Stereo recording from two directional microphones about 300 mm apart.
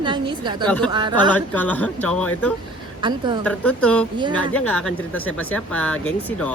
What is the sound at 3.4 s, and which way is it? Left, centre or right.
Speech, centre.